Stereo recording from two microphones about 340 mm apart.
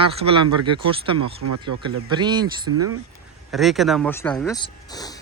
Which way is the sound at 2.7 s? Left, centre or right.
Right.